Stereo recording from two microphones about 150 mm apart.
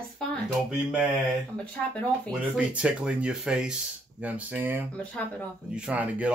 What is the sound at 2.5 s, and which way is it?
Speech, 5° right (ahead or behind).